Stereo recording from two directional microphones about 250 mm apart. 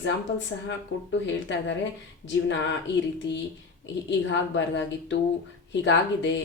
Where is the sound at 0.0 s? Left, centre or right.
Left.